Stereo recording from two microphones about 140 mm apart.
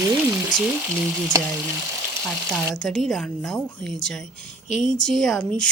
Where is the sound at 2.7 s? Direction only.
5° left (ahead or behind).